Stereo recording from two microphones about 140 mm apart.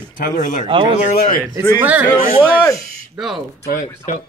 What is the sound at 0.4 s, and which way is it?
Speech, 65° left (ahead or behind).